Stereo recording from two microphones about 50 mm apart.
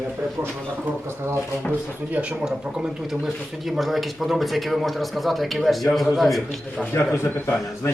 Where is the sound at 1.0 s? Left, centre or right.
Right.